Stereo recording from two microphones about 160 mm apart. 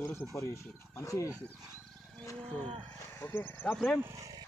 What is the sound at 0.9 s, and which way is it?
Speech, 20° left (ahead or behind).